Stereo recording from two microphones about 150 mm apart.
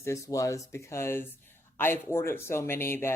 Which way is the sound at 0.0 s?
20° left (ahead or behind).